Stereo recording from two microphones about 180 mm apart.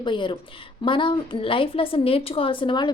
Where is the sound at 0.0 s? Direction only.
25° left (ahead or behind).